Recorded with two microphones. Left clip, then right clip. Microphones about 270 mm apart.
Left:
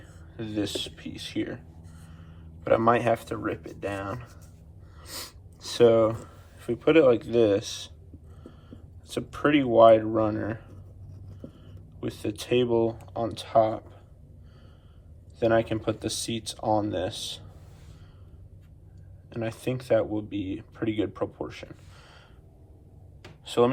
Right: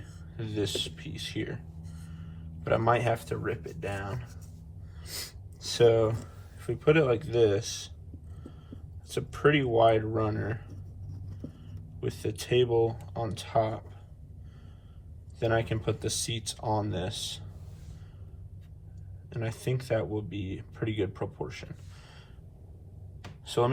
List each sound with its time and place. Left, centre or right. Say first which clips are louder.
0.0 s speech: left 4 dB; centre
9.0 s speech: even; centre
11.9 s speech: left 2 dB; centre
15.4 s speech: left 5 dB; centre
19.3 s speech: left 3 dB; centre
23.5 s speech: left 5 dB; centre